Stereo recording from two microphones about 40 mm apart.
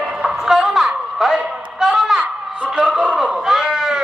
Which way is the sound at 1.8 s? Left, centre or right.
Centre.